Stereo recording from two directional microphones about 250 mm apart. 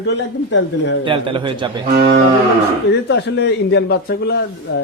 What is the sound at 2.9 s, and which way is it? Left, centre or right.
A man's voice, left.